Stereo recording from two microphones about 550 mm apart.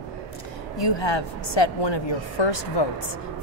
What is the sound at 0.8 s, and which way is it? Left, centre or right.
Speech, left.